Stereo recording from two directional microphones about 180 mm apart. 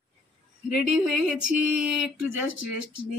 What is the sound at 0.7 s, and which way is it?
Speech, 5° right (ahead or behind).